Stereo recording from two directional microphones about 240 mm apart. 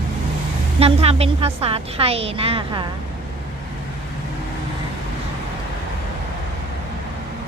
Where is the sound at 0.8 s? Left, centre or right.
Right.